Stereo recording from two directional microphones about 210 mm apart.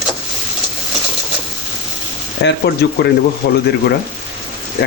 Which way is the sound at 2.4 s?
55° left (ahead or behind).